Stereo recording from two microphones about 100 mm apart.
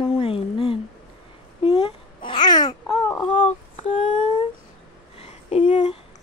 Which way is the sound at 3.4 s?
70° left (ahead or behind).